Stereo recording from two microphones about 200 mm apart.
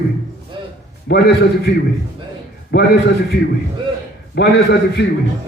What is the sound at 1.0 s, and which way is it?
Speech, 55° left (ahead or behind).